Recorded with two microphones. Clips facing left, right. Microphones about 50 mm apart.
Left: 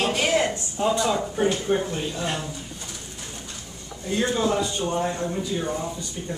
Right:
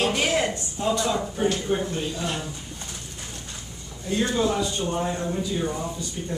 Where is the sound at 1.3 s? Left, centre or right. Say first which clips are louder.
Left 2 dB; centre.